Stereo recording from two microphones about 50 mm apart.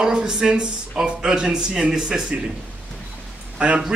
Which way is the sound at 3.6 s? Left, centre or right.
Centre.